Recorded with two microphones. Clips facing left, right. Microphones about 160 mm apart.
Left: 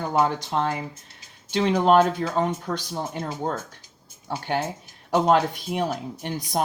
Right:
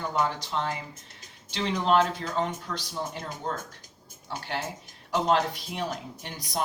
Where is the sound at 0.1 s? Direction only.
50° left (ahead or behind).